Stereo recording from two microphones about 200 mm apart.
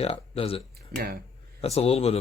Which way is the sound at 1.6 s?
30° left (ahead or behind).